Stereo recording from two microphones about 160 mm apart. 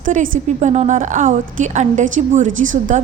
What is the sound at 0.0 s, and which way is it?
A woman's voice, 55° right (ahead or behind).